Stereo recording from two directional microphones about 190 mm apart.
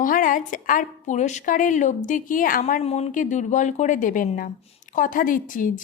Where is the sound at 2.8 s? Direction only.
35° left (ahead or behind).